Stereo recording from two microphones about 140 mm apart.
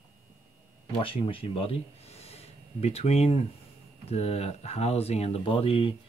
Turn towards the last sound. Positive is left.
turn(degrees=40)  # may be behind; listen again after turning